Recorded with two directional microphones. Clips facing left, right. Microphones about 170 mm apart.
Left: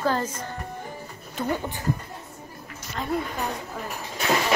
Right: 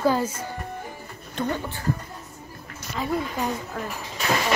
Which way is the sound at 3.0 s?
5° right (ahead or behind).